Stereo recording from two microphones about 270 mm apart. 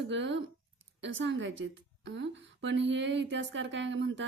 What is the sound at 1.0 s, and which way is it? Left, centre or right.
A woman's voice, right.